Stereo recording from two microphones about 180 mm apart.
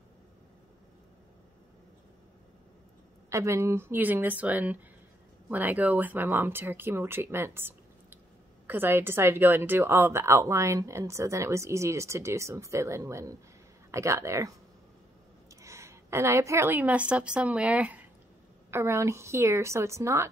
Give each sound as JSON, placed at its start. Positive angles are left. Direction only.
{"t": 3.3, "sound": "a woman's voice", "side_deg": -15}
{"t": 15.6, "sound": "a woman's voice", "side_deg": -15}